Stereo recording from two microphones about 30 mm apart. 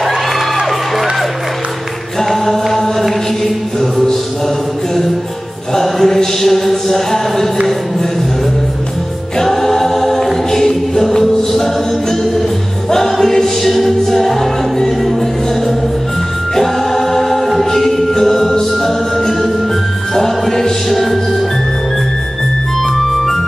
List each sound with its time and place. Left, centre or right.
2.1 s chant: centre
5.8 s a sound: centre
9.4 s choir: centre
12.9 s music: centre
16.5 s choir: centre
17.6 s music: centre
22.9 s music: centre